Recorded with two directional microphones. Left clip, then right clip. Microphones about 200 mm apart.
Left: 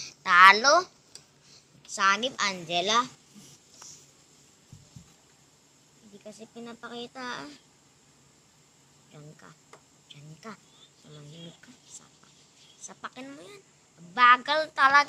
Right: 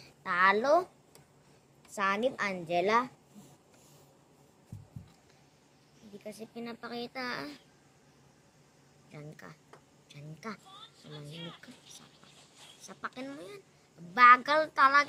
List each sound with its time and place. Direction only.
0.0 s a woman's voice: centre (ahead or behind)
1.9 s speech: 5° right (ahead or behind)
6.2 s speech: 5° right (ahead or behind)
9.1 s speech: 10° right (ahead or behind)
11.3 s speech: 45° right (ahead or behind)
12.8 s speech: 5° right (ahead or behind)